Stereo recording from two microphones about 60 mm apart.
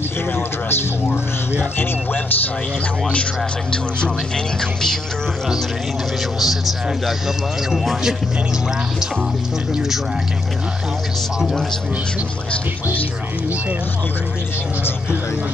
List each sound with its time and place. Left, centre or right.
1.6 s speech: left
6.4 s a man's voice: centre